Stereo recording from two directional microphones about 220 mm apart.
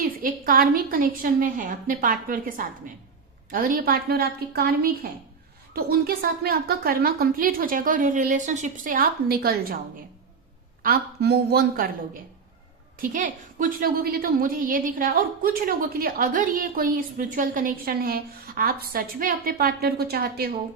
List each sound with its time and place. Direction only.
0.0 s a woman's voice: 40° right (ahead or behind)
10.8 s a woman's voice: 45° right (ahead or behind)
13.0 s a woman's voice: 40° right (ahead or behind)